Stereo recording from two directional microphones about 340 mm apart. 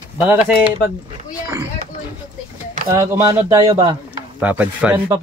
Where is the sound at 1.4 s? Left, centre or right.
Centre.